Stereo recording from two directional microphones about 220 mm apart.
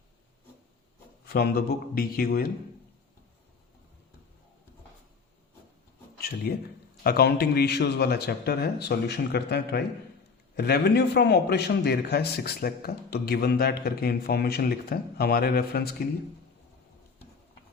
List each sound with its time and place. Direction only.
1.3 s a man's voice: 45° left (ahead or behind)
6.1 s a sound: 45° left (ahead or behind)
7.0 s a man's voice: 45° left (ahead or behind)